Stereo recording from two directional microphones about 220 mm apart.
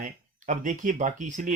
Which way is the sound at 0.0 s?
35° right (ahead or behind).